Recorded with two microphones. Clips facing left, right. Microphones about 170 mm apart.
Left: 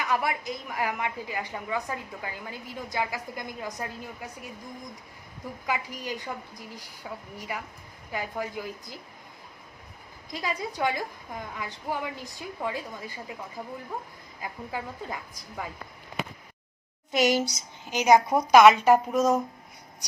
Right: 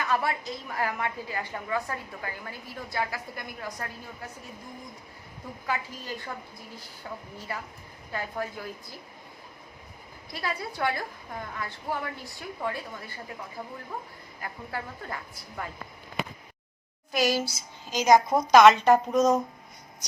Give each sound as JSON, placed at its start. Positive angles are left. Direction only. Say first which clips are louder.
{"t": 0.0, "sound": "a woman's voice", "louder": "even", "side_deg": 15}
{"t": 5.6, "sound": "a woman's voice", "louder": "left 1 dB", "side_deg": 15}
{"t": 10.3, "sound": "a woman's voice", "louder": "left 2 dB", "side_deg": 15}
{"t": 14.4, "sound": "a woman's voice", "louder": "left 1 dB", "side_deg": 15}
{"t": 17.1, "sound": "a woman's voice", "louder": "left 2 dB", "side_deg": 20}